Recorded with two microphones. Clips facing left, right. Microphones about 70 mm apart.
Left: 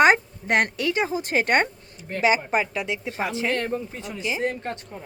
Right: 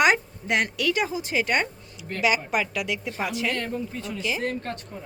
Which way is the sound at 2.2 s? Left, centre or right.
Left.